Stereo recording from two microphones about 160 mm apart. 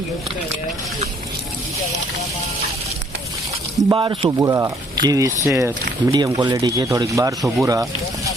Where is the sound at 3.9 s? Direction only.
30° right (ahead or behind).